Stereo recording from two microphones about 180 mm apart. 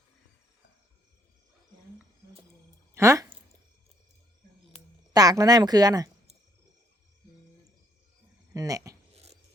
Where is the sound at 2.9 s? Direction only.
15° right (ahead or behind).